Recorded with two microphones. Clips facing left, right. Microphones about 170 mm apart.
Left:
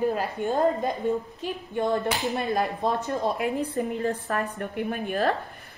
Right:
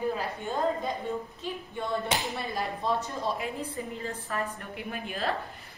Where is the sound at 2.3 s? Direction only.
50° left (ahead or behind).